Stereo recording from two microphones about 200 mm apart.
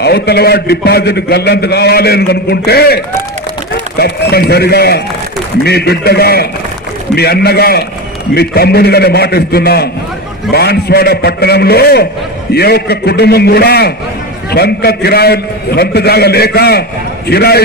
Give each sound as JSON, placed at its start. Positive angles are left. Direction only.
{"t": 0.0, "sound": "a man's voice", "side_deg": 55}
{"t": 4.0, "sound": "a man's voice", "side_deg": 50}